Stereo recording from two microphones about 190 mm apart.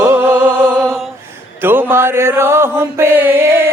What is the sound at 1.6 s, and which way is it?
Mantra, 10° right (ahead or behind).